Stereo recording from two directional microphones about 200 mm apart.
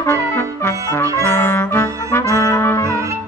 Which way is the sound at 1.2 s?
15° left (ahead or behind).